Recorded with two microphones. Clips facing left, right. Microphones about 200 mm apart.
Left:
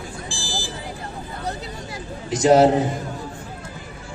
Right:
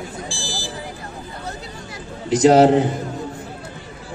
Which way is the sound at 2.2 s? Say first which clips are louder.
Right 2 dB; 65° right (ahead or behind).